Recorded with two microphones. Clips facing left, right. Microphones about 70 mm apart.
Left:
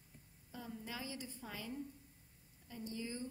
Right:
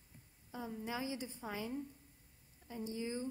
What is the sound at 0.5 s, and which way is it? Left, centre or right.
A woman's voice, right.